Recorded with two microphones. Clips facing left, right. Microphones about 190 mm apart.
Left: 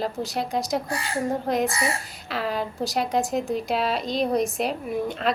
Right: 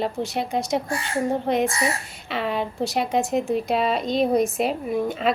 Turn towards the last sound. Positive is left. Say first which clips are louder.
# right 3 dB
turn(degrees=0)  # may be behind; listen again after turning